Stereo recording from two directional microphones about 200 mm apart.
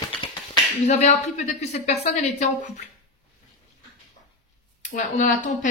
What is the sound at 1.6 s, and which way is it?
Speech, 35° left (ahead or behind).